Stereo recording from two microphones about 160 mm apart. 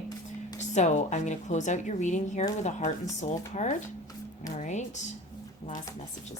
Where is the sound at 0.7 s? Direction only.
45° left (ahead or behind).